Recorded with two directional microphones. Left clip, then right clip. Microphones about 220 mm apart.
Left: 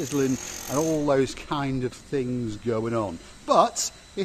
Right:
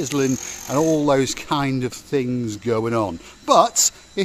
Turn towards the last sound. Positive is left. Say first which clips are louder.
# right 9 dB
turn(degrees=-40)  # may be behind; listen again after turning